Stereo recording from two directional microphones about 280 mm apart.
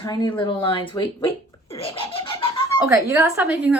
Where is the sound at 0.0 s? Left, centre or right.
Centre.